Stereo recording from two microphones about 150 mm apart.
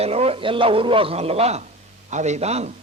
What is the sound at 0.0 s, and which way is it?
A man's voice, 40° right (ahead or behind).